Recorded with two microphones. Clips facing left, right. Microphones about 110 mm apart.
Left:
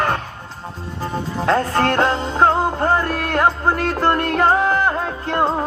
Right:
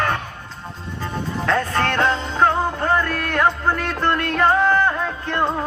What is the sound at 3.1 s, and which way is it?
Music, 20° left (ahead or behind).